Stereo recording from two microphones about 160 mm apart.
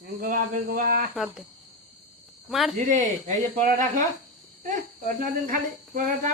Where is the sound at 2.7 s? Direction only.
50° right (ahead or behind).